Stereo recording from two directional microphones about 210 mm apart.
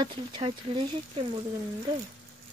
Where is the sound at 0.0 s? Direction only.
25° right (ahead or behind).